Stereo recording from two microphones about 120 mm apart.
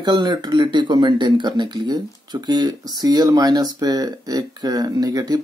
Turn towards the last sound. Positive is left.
turn(degrees=-35)  # may be behind; listen again after turning